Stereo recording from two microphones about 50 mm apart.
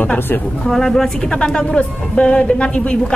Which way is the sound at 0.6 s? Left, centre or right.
Centre.